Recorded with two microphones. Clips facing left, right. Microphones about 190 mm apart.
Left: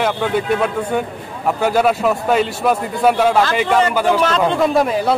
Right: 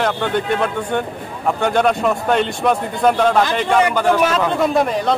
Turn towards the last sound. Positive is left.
turn(degrees=0)  # may be behind; listen again after turning